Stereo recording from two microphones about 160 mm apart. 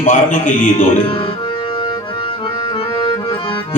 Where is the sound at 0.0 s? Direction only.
50° left (ahead or behind).